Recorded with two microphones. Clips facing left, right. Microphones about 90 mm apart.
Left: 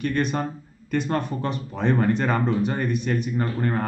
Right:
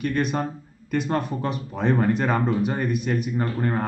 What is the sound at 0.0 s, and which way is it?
Speech, 5° right (ahead or behind).